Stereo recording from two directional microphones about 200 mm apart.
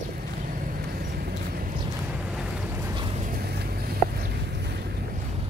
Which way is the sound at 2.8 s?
15° right (ahead or behind).